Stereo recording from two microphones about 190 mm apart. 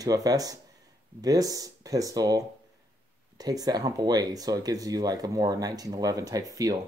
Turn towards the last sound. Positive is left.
turn(degrees=-20)  # may be behind; listen again after turning